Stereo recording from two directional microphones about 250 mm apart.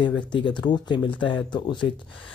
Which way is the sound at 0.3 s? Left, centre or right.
Centre.